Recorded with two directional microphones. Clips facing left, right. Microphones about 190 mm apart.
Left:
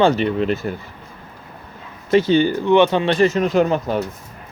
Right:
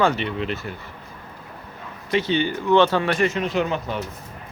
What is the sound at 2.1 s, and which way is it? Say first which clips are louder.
Speech: left 7 dB; 40° left (ahead or behind).